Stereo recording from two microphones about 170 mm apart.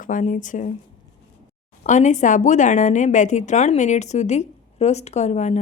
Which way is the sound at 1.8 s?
45° left (ahead or behind).